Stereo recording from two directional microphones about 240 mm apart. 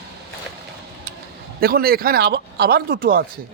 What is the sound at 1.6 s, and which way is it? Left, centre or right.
Speech, right.